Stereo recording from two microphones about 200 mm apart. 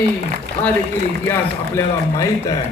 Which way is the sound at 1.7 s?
15° left (ahead or behind).